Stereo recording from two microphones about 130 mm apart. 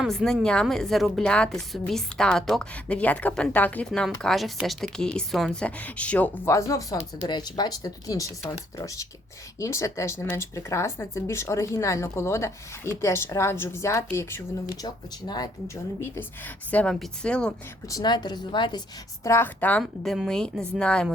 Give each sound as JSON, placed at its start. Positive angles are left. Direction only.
{"t": 0.0, "sound": "a woman's voice", "side_deg": 0}
{"t": 9.6, "sound": "speech", "side_deg": 20}
{"t": 14.8, "sound": "a woman's voice", "side_deg": 30}
{"t": 15.6, "sound": "speech", "side_deg": 20}
{"t": 16.7, "sound": "a woman's voice", "side_deg": 5}
{"t": 17.8, "sound": "a woman's voice", "side_deg": 30}
{"t": 19.2, "sound": "a woman's voice", "side_deg": 20}
{"t": 19.8, "sound": "a woman's voice", "side_deg": 0}